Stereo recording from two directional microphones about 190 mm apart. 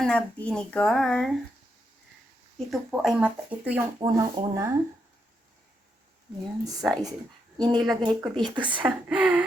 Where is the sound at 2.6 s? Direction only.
Centre (ahead or behind).